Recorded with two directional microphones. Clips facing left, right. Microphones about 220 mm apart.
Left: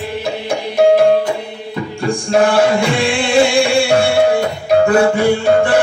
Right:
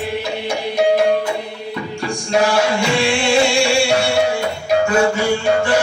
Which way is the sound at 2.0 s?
55° left (ahead or behind).